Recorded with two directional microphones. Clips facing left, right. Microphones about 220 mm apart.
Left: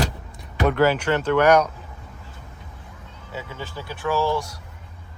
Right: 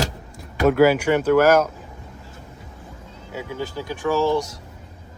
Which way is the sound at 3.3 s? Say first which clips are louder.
Right 5 dB; 15° right (ahead or behind).